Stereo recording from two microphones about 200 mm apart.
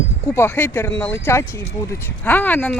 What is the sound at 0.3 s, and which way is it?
Speech, 10° left (ahead or behind).